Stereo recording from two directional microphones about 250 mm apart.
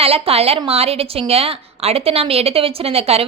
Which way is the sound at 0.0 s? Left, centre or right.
Right.